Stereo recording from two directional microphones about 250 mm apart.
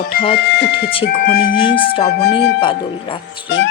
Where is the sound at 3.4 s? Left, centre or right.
Left.